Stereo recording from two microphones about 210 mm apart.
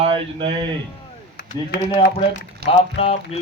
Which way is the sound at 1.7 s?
55° left (ahead or behind).